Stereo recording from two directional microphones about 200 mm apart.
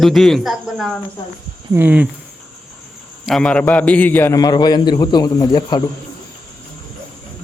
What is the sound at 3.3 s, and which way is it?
A man's voice, 5° left (ahead or behind).